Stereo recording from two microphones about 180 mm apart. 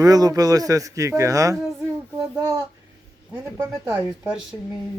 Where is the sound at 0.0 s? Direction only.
20° right (ahead or behind).